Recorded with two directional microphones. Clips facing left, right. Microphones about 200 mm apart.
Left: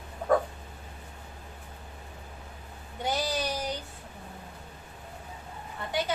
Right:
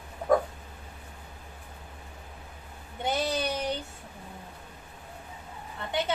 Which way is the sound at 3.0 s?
25° right (ahead or behind).